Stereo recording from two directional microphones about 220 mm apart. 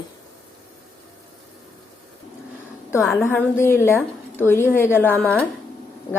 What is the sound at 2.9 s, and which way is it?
A woman's voice, 10° left (ahead or behind).